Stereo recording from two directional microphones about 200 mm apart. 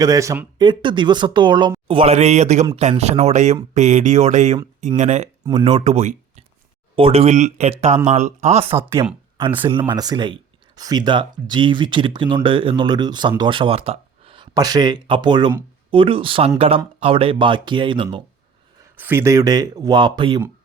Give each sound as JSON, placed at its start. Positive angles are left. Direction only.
{"t": 0.0, "sound": "speech", "side_deg": -15}
{"t": 5.5, "sound": "speech", "side_deg": -25}
{"t": 9.6, "sound": "speech", "side_deg": -25}
{"t": 18.9, "sound": "speech", "side_deg": -10}